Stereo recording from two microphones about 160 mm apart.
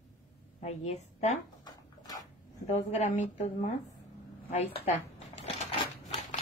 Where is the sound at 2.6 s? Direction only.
45° left (ahead or behind).